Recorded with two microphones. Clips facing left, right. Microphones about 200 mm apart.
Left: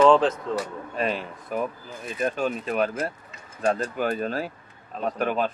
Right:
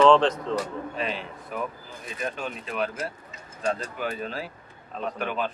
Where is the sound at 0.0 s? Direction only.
5° left (ahead or behind).